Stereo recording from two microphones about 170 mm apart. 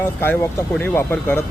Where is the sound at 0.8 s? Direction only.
10° left (ahead or behind).